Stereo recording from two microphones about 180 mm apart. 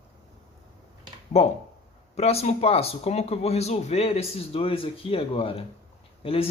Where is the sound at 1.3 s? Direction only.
35° left (ahead or behind).